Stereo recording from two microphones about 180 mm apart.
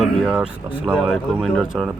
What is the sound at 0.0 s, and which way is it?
Speech, centre (ahead or behind).